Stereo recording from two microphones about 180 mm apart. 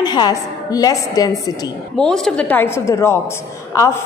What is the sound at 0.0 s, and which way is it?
A woman's voice, 25° left (ahead or behind).